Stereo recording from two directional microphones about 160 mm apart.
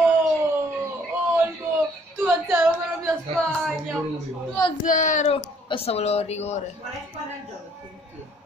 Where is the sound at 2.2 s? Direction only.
10° right (ahead or behind).